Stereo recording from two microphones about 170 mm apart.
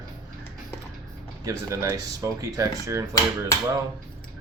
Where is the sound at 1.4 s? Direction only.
20° right (ahead or behind).